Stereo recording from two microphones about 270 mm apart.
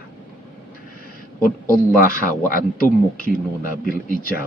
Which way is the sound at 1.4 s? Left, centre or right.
Left.